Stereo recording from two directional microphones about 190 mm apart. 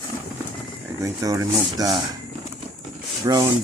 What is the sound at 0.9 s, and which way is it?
Speech, 15° right (ahead or behind).